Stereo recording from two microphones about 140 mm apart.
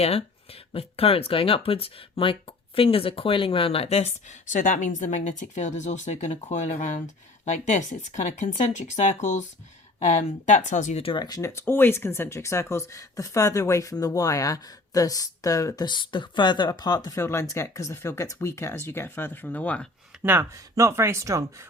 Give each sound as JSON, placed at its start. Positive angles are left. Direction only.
{"t": 0.0, "sound": "speech", "side_deg": 45}
{"t": 11.0, "sound": "speech", "side_deg": 35}
{"t": 20.2, "sound": "speech", "side_deg": -15}